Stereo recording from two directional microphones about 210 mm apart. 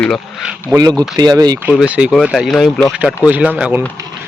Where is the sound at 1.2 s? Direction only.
20° right (ahead or behind).